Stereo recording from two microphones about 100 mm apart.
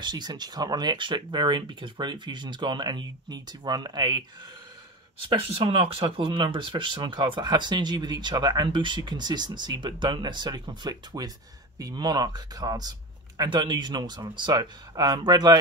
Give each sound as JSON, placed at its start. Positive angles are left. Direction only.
{"t": 0.0, "sound": "speech", "side_deg": -45}
{"t": 5.3, "sound": "speech", "side_deg": -65}